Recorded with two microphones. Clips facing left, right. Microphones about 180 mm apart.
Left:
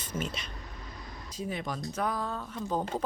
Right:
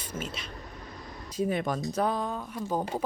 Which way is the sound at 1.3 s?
55° right (ahead or behind).